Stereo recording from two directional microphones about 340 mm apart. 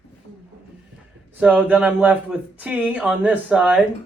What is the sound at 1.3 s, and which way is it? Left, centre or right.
Speech, centre.